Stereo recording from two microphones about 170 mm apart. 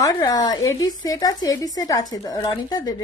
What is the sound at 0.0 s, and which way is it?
A woman's voice, 20° left (ahead or behind).